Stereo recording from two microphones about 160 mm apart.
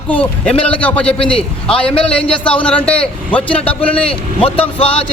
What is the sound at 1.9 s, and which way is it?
Speech, 35° left (ahead or behind).